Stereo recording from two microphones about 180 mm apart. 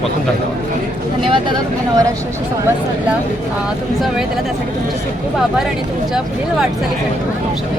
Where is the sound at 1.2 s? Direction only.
25° right (ahead or behind).